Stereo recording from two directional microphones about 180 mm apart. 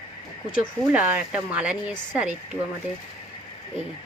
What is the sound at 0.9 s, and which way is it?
Speech, 10° right (ahead or behind).